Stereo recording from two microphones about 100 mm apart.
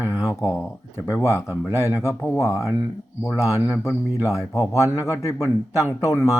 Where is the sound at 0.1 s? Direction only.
30° left (ahead or behind).